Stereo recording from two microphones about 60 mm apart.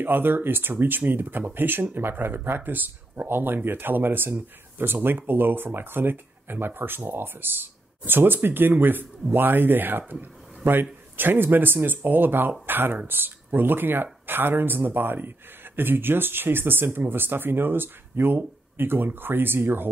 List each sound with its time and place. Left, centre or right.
0.0 s speech: right